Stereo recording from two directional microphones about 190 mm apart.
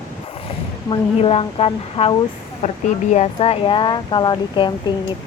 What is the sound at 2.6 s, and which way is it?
Speech, 40° left (ahead or behind).